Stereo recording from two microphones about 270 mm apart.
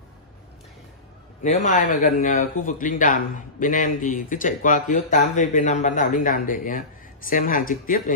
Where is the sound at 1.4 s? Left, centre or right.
Left.